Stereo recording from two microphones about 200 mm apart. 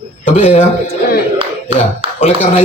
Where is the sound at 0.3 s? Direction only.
30° left (ahead or behind).